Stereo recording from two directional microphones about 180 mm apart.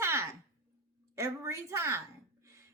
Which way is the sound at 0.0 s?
15° right (ahead or behind).